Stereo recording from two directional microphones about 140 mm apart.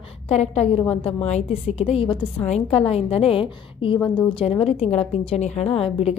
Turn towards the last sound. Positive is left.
turn(degrees=45)  # may be behind; listen again after turning